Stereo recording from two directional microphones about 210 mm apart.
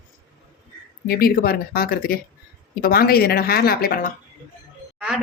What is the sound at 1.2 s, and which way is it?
Speech, 45° left (ahead or behind).